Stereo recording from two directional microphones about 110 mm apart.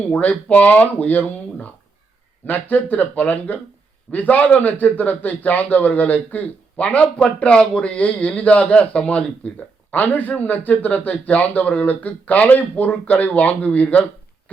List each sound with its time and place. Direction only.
0.0 s a man's voice: 15° left (ahead or behind)